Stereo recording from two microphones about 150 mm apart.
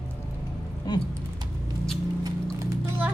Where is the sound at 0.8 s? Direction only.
25° left (ahead or behind).